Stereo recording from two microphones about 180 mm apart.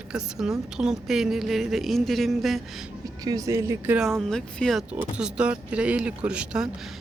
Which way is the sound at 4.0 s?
Centre (ahead or behind).